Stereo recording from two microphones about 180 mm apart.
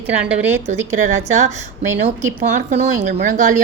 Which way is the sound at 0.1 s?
10° right (ahead or behind).